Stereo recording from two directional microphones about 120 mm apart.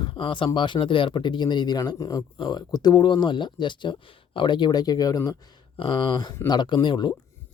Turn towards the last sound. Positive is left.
turn(degrees=40)  # may be behind; listen again after turning